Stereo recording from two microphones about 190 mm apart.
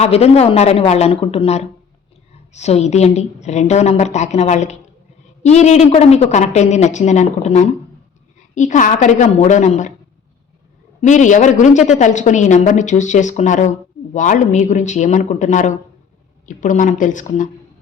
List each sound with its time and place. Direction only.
0.0 s a woman's voice: 35° left (ahead or behind)
11.0 s a woman's voice: 40° left (ahead or behind)